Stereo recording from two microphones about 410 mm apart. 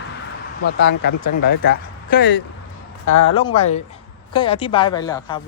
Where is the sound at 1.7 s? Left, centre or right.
Left.